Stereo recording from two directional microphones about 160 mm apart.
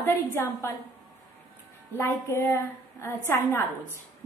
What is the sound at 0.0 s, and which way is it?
Speech, 15° left (ahead or behind).